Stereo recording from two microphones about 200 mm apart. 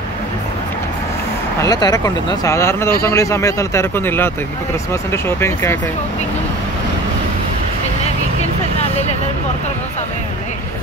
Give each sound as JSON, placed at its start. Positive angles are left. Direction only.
{"t": 1.6, "sound": "speech", "side_deg": 20}